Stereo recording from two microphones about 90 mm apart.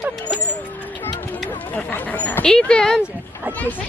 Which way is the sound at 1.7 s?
20° left (ahead or behind).